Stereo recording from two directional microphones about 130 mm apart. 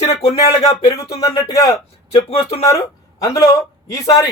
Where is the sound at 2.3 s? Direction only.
50° left (ahead or behind).